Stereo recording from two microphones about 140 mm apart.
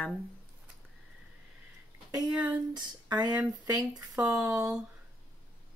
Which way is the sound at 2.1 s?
25° right (ahead or behind).